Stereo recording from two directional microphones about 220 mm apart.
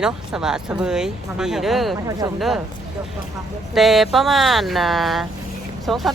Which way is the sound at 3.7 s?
Centre (ahead or behind).